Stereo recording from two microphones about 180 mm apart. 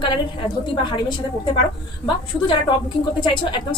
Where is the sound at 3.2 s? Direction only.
25° left (ahead or behind).